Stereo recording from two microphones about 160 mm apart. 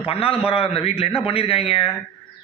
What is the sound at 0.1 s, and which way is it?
Speech, 35° left (ahead or behind).